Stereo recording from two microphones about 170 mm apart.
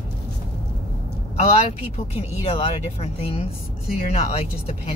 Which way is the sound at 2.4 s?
35° left (ahead or behind).